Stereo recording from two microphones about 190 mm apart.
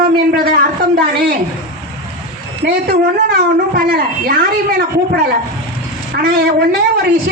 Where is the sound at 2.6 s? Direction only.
55° right (ahead or behind).